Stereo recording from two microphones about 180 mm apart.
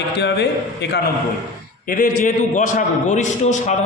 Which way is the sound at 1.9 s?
50° left (ahead or behind).